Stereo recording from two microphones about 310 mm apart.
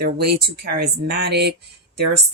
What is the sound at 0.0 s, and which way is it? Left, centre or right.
Speech, right.